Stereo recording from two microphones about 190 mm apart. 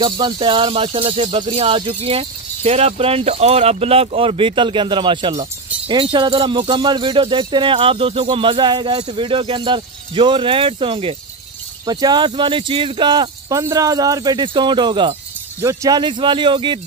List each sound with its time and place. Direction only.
0.0 s speech: 25° right (ahead or behind)